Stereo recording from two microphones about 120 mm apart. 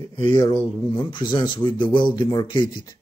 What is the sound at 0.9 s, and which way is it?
Speech, 40° left (ahead or behind).